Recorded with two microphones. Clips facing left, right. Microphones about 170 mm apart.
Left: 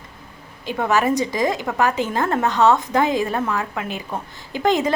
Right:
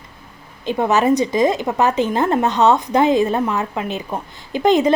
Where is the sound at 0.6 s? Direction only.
20° right (ahead or behind).